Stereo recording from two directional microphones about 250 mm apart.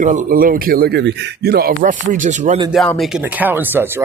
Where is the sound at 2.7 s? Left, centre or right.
Centre.